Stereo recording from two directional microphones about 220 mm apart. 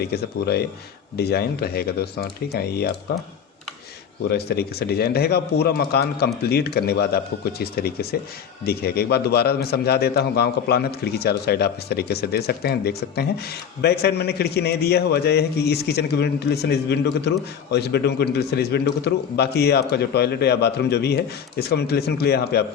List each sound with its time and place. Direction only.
0.0 s a man's voice: 45° left (ahead or behind)
4.3 s a man's voice: 45° left (ahead or behind)